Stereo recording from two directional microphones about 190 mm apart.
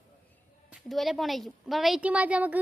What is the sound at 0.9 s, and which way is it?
A woman's voice, centre (ahead or behind).